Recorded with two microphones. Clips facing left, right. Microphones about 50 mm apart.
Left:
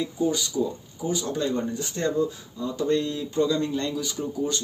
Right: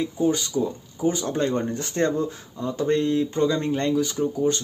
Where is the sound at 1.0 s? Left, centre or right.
Right.